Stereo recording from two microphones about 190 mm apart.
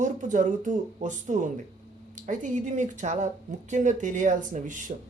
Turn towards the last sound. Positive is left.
turn(degrees=-40)  # may be behind; listen again after turning